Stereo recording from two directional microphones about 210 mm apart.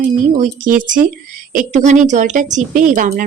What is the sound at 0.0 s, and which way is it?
Speech, 40° right (ahead or behind).